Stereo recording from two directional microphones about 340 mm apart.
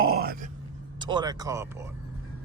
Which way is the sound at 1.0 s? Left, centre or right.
Centre.